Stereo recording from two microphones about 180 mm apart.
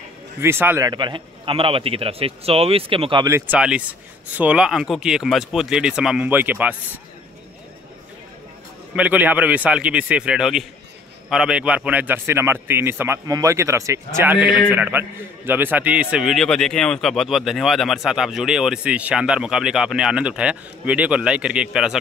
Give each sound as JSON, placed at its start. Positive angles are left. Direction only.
{"t": 0.4, "sound": "a man's voice", "side_deg": -15}
{"t": 3.3, "sound": "a man's voice", "side_deg": -10}
{"t": 8.9, "sound": "a man's voice", "side_deg": -10}